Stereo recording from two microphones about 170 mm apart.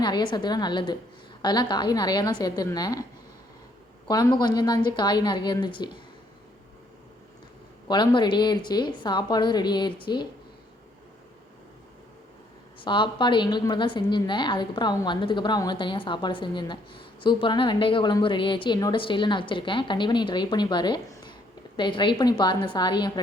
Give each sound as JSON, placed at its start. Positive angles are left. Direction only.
{"t": 0.0, "sound": "a woman's voice", "side_deg": 25}
{"t": 4.1, "sound": "a woman's voice", "side_deg": 25}
{"t": 7.9, "sound": "a woman's voice", "side_deg": 25}
{"t": 12.8, "sound": "a woman's voice", "side_deg": 30}